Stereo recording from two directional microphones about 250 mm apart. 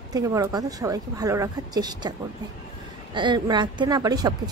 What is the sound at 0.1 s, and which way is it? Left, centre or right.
Speech, centre.